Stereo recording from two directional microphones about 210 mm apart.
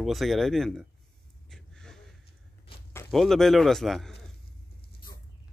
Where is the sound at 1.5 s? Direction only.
5° left (ahead or behind).